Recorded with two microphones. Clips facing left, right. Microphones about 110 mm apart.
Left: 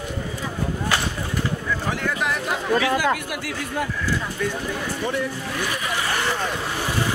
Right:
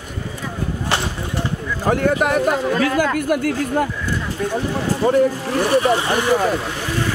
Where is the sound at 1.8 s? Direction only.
45° right (ahead or behind).